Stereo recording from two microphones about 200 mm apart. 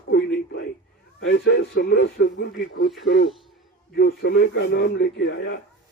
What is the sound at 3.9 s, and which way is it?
A man's voice, 60° left (ahead or behind).